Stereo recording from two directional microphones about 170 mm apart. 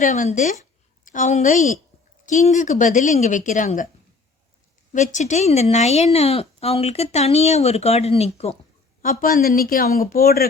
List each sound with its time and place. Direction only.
0.0 s speech: 45° left (ahead or behind)
4.9 s speech: 45° left (ahead or behind)
9.0 s speech: 55° left (ahead or behind)